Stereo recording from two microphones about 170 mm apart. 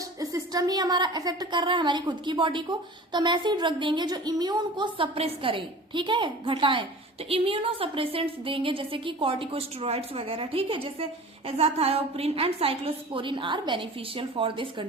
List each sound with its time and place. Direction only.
0.2 s a woman's voice: 20° right (ahead or behind)